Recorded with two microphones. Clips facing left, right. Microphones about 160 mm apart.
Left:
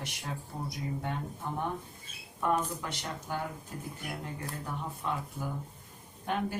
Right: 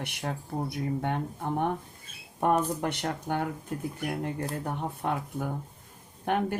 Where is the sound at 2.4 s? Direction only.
60° right (ahead or behind).